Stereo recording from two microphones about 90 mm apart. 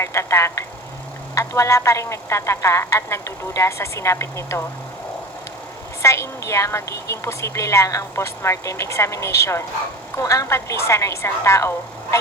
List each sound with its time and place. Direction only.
0.0 s a woman's voice: 30° left (ahead or behind)
6.0 s a woman's voice: 30° left (ahead or behind)